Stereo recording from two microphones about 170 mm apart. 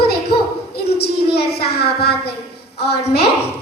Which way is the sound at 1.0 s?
70° left (ahead or behind).